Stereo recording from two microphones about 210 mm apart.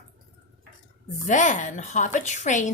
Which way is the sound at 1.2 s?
35° left (ahead or behind).